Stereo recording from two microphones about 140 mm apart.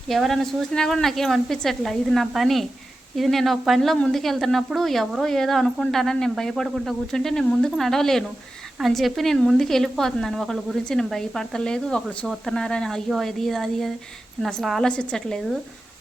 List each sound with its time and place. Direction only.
0.1 s a woman's voice: centre (ahead or behind)